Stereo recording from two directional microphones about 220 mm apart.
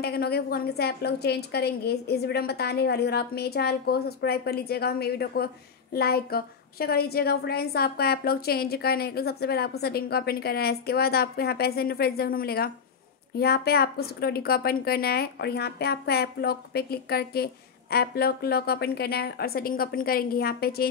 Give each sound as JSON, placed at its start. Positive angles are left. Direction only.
{"t": 0.0, "sound": "a woman's voice", "side_deg": 45}